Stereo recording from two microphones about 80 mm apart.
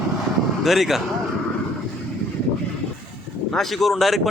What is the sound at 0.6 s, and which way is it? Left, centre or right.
Speech, centre.